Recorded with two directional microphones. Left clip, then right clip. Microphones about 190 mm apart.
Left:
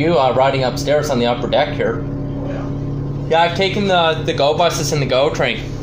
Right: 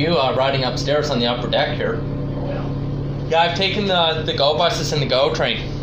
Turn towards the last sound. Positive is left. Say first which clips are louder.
# left 2 dB
turn(degrees=20)  # may be behind; listen again after turning